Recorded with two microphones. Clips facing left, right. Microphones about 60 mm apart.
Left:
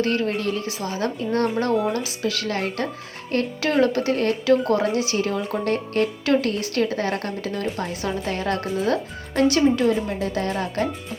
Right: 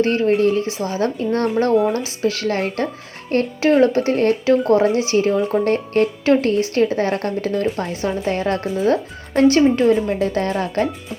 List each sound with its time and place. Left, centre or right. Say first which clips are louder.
0.0 s a woman's voice: right 7 dB; right
10.1 s speech: right 5 dB; right